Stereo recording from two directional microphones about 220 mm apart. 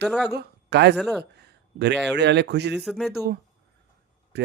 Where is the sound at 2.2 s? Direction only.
50° right (ahead or behind).